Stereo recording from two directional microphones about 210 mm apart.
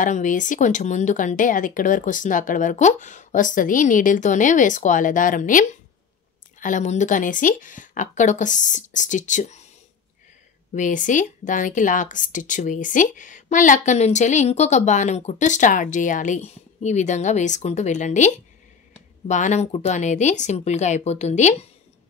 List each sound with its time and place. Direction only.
0.0 s a woman's voice: 35° left (ahead or behind)
10.7 s a woman's voice: 35° left (ahead or behind)